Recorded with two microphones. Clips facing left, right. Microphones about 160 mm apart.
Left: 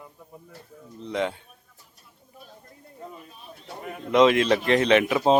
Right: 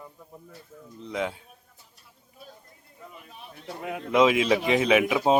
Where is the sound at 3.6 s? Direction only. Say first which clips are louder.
Right 3 dB; 80° right.